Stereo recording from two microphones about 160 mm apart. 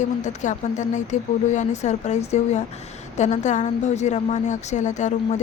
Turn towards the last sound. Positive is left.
turn(degrees=50)  # may be behind; listen again after turning